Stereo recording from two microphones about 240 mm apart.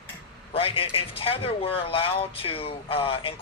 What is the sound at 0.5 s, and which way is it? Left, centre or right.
Speech, left.